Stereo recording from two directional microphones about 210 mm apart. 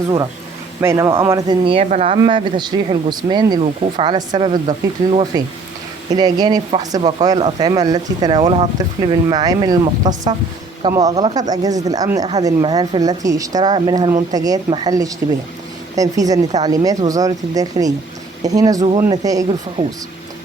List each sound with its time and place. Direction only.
0.8 s speech: 15° right (ahead or behind)
19.8 s speech: 40° right (ahead or behind)